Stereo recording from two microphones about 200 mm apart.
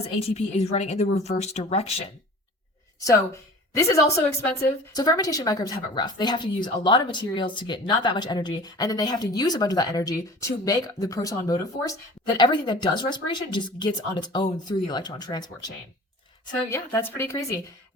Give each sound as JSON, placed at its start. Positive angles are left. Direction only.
{"t": 0.0, "sound": "a woman's voice", "side_deg": 30}
{"t": 3.7, "sound": "a woman's voice", "side_deg": 15}